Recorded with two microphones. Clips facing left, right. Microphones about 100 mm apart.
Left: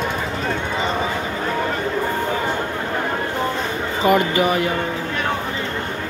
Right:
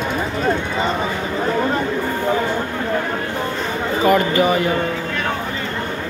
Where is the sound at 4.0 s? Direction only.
15° left (ahead or behind).